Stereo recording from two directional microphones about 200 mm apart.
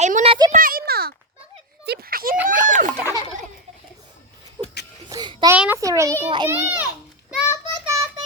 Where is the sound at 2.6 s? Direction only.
40° right (ahead or behind).